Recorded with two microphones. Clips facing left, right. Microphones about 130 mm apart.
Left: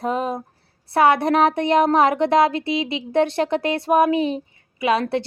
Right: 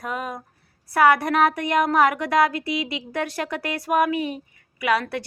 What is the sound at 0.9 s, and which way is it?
Speech, 25° left (ahead or behind).